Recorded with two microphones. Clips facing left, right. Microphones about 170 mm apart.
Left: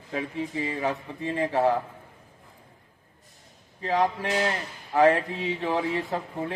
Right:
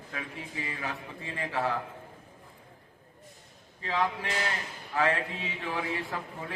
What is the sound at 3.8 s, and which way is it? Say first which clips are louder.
A man's voice: left 6 dB; 45° left (ahead or behind).